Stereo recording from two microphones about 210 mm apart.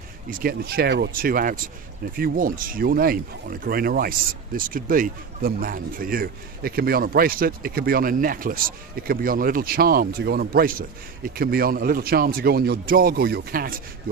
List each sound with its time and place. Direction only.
0.3 s speech: 45° right (ahead or behind)